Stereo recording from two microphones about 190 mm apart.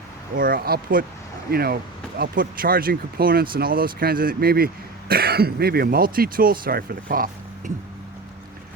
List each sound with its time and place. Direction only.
0.3 s speech: 50° right (ahead or behind)